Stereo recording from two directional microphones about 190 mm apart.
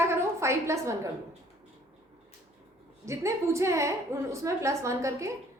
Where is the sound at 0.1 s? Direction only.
15° right (ahead or behind).